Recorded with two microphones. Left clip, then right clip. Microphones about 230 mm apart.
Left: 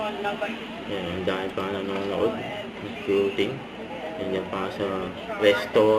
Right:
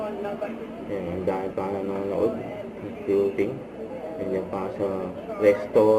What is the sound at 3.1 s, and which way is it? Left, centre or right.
Speech, left.